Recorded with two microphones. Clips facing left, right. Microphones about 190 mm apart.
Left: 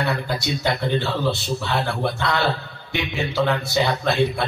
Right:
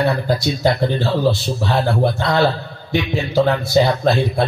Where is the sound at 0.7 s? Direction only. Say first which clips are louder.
Right 5 dB; 40° right (ahead or behind).